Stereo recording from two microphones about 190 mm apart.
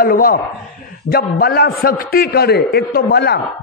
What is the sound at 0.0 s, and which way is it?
A man's voice, 50° left (ahead or behind).